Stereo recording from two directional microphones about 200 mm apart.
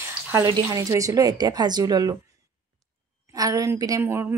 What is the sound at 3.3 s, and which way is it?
Speech, 15° right (ahead or behind).